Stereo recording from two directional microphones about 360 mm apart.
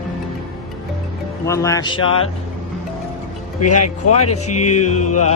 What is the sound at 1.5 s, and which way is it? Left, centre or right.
Speech, centre.